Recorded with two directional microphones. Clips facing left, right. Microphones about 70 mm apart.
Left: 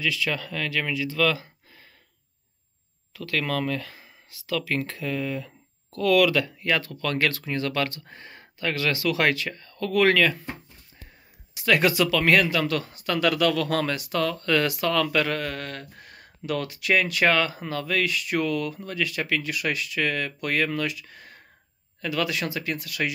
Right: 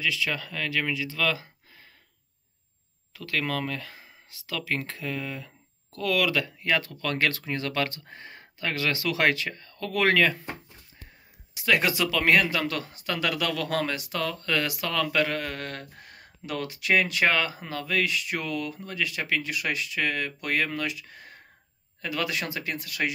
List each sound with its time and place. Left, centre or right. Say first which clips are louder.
0.0 s speech: left 2 dB; centre
3.1 s speech: left 2 dB; centre
11.5 s speech: left 3 dB; centre
13.0 s speech: left 6 dB; centre
15.6 s speech: left 1 dB; right
16.1 s speech: left 6 dB; centre